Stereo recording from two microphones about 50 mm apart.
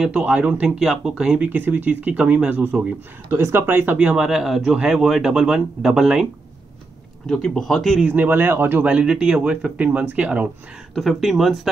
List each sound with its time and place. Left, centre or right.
0.0 s speech: right
0.7 s speech: centre
1.1 s speech: centre
1.5 s speech: right
3.3 s speech: right
3.6 s speech: right
4.0 s speech: right
4.3 s speech: centre
7.5 s speech: centre
8.1 s speech: right
9.0 s speech: centre
11.0 s speech: centre